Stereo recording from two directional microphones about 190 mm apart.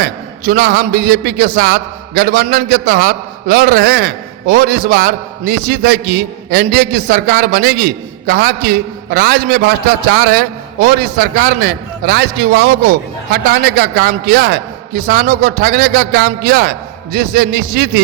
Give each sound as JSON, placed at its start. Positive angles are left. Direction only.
{"t": 0.0, "sound": "a man's voice", "side_deg": -55}